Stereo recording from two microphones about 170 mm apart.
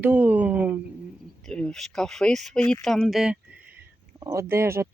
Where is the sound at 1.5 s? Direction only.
5° left (ahead or behind).